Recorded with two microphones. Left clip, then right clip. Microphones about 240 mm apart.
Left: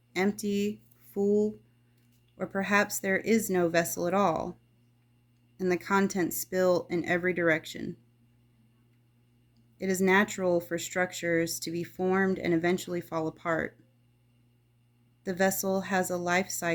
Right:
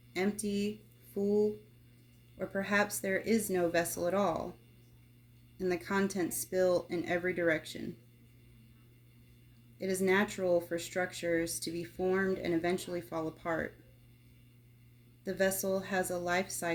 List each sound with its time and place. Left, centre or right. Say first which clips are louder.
0.1 s speech: left 5 dB; left
5.5 s speech: left 6 dB; left
9.7 s speech: left 5 dB; left
15.2 s speech: left 4 dB; left